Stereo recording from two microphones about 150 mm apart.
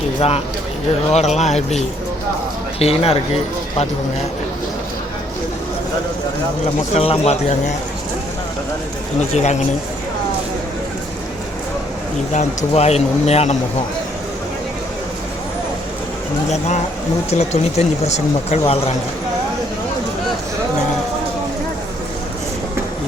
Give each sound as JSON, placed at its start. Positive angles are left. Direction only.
{"t": 0.2, "sound": "speech", "side_deg": 40}
{"t": 6.9, "sound": "speech", "side_deg": 40}
{"t": 9.3, "sound": "speech", "side_deg": 50}
{"t": 12.3, "sound": "speech", "side_deg": 45}
{"t": 16.5, "sound": "speech", "side_deg": 50}